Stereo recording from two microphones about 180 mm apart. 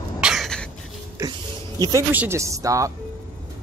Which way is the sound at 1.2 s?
20° right (ahead or behind).